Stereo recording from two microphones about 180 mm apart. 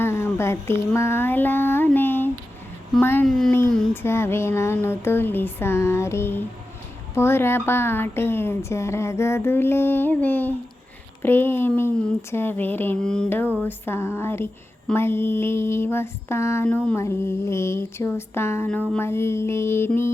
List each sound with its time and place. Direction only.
0.0 s a sound: 15° left (ahead or behind)
3.0 s speech: 10° left (ahead or behind)
4.0 s speech: 15° left (ahead or behind)